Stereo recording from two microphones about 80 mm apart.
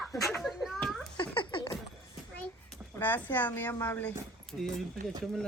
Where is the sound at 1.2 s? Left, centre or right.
Left.